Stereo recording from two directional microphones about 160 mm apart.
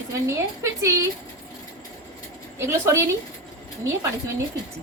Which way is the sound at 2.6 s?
15° right (ahead or behind).